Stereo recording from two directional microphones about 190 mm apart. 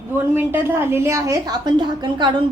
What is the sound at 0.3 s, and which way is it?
A woman's voice, 10° right (ahead or behind).